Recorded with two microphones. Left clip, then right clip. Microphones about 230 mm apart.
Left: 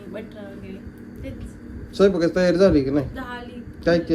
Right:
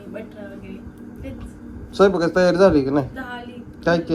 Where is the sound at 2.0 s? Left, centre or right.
Centre.